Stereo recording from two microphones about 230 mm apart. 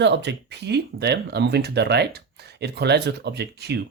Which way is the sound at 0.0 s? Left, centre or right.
Right.